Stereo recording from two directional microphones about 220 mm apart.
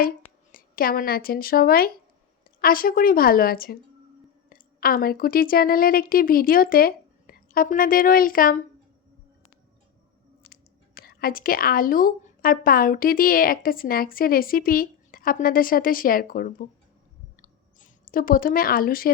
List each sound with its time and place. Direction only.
0.5 s a woman's voice: 40° left (ahead or behind)
10.4 s speech: 40° left (ahead or behind)
17.4 s clicking: 35° left (ahead or behind)